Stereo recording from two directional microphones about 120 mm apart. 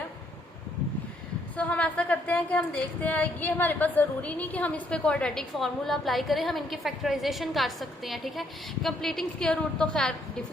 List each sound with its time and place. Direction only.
1.5 s a woman's voice: 10° left (ahead or behind)